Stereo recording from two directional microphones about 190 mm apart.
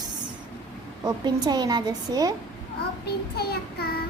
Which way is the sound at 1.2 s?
20° right (ahead or behind).